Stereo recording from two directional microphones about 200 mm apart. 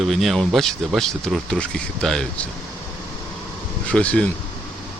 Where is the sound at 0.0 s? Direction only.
Centre (ahead or behind).